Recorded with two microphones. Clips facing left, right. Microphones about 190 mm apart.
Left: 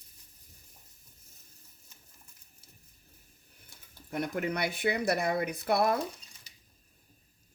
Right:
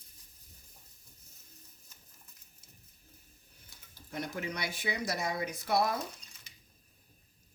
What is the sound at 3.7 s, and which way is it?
Speech, 55° left (ahead or behind).